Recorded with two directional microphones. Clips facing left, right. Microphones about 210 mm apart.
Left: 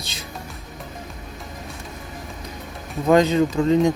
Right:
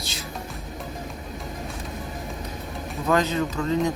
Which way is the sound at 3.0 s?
25° left (ahead or behind).